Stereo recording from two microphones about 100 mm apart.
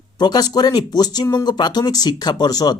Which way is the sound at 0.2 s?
40° left (ahead or behind).